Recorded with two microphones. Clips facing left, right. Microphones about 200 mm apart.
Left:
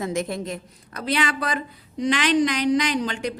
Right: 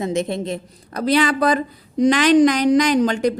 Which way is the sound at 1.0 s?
35° right (ahead or behind).